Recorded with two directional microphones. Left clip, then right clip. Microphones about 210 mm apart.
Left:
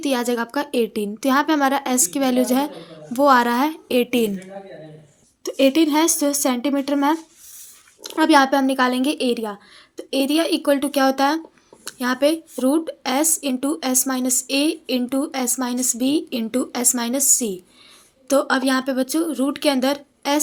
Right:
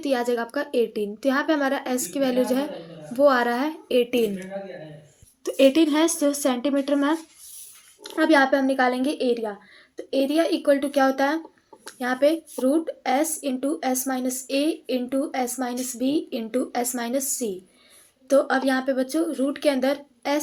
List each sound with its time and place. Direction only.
0.0 s speech: 45° left (ahead or behind)
5.4 s speech: 25° left (ahead or behind); by 20.4 s 45° left (ahead or behind)